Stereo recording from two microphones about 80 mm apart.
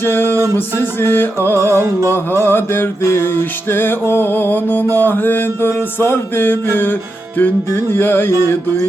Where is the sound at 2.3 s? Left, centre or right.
Left.